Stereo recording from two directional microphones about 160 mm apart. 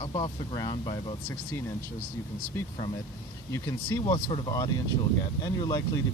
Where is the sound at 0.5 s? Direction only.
25° left (ahead or behind).